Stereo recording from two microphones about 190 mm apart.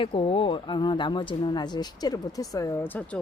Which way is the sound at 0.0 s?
25° left (ahead or behind).